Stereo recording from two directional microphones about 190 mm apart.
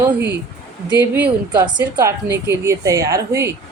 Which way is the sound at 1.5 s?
20° right (ahead or behind).